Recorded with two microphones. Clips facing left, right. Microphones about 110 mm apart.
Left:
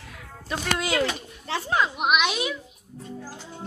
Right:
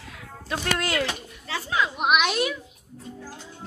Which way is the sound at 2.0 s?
Centre (ahead or behind).